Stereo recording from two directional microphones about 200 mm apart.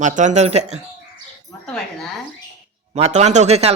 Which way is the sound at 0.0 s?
40° right (ahead or behind).